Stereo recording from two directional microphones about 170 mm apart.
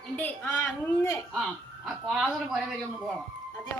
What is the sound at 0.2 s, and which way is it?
A woman's voice, 10° left (ahead or behind).